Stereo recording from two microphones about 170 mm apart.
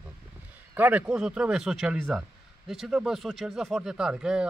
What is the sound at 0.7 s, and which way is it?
Speech, 10° right (ahead or behind).